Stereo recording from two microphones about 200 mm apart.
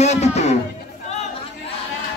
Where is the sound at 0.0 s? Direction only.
35° left (ahead or behind).